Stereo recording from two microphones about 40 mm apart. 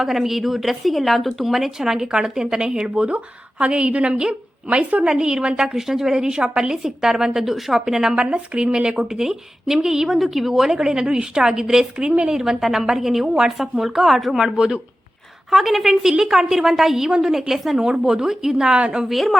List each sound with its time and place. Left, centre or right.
0.0 s a woman's voice: centre; by 5.0 s right
5.0 s a woman's voice: centre
5.7 s a woman's voice: centre
8.1 s a woman's voice: right
13.6 s a woman's voice: centre
14.3 s a woman's voice: centre
15.4 s a woman's voice: centre; by 19.0 s right
19.0 s a woman's voice: centre